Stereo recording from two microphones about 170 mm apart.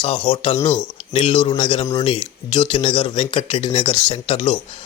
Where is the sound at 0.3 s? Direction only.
30° left (ahead or behind).